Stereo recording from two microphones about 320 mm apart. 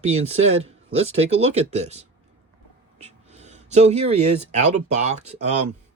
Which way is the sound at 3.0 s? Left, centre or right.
Centre.